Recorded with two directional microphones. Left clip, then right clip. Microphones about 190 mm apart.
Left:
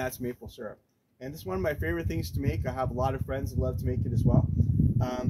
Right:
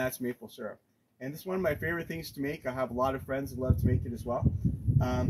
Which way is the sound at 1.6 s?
25° left (ahead or behind).